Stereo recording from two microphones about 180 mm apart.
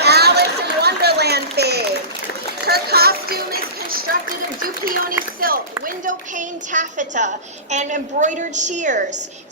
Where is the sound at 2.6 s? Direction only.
60° right (ahead or behind).